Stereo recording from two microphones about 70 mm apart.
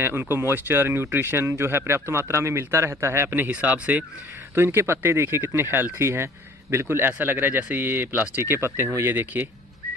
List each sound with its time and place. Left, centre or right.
0.0 s speech: right
4.6 s speech: right